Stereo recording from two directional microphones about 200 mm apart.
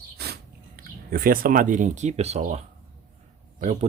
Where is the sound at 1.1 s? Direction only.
45° right (ahead or behind).